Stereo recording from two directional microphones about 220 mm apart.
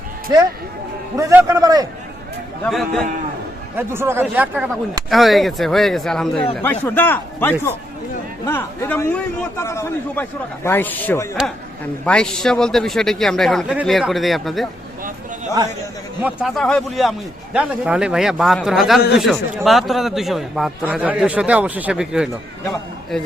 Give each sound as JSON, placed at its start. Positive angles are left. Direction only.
{"t": 1.1, "sound": "speech", "side_deg": -10}
{"t": 2.6, "sound": "a man's voice", "side_deg": 0}
{"t": 3.8, "sound": "a man's voice", "side_deg": -10}
{"t": 16.2, "sound": "a man's voice", "side_deg": 0}